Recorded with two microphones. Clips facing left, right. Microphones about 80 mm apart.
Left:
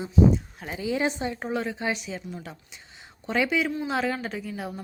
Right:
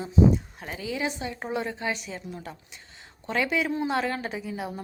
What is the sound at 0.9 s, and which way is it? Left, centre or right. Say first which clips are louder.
Speech: left 4 dB; left.